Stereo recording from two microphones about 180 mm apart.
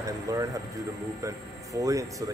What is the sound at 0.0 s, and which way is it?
Music, 20° right (ahead or behind).